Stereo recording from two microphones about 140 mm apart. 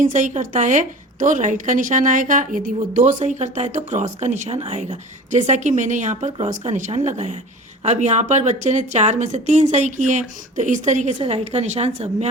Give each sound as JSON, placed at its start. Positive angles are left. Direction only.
{"t": 0.0, "sound": "a woman's voice", "side_deg": -65}
{"t": 5.3, "sound": "a woman's voice", "side_deg": -60}